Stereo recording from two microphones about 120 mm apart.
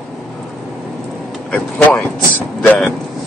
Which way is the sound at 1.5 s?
10° left (ahead or behind).